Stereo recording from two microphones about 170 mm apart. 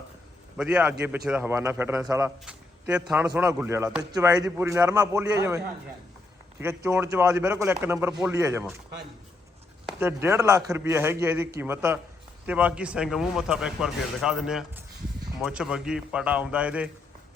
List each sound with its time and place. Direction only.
0.5 s a man's voice: 5° right (ahead or behind)
2.4 s a sound: 5° right (ahead or behind)
3.3 s a man's voice: 15° right (ahead or behind)
4.1 s a man's voice: 20° right (ahead or behind)
10.0 s a man's voice: 15° right (ahead or behind)